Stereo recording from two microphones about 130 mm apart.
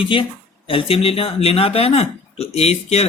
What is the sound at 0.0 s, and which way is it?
Speech, 40° left (ahead or behind).